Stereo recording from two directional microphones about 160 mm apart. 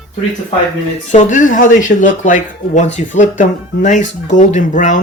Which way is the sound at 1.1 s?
50° left (ahead or behind).